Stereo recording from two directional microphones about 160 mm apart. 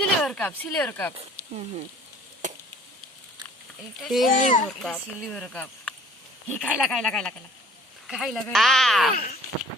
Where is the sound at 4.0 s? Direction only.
Centre (ahead or behind).